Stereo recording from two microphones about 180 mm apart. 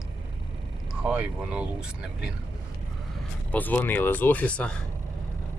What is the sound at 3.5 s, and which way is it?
Speech, 10° left (ahead or behind).